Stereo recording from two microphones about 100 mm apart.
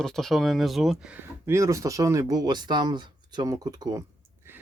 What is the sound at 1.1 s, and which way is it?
Speech, 30° right (ahead or behind).